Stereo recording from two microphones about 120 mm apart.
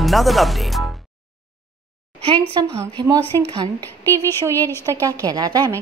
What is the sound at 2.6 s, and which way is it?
Speech, 35° right (ahead or behind).